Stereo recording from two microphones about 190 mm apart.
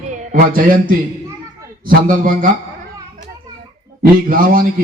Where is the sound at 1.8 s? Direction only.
45° right (ahead or behind).